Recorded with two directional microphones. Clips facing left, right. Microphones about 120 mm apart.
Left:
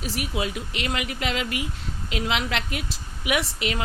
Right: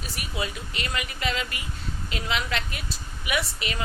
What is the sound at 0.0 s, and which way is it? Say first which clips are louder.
A woman's voice: left 4 dB; 90° left.